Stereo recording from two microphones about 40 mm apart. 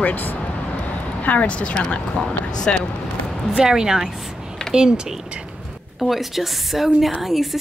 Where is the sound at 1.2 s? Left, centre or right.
Left.